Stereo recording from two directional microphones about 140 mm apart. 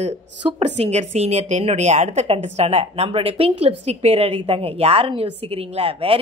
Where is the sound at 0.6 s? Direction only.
50° right (ahead or behind).